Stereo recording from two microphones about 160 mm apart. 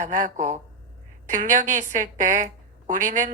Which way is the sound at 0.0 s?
50° right (ahead or behind).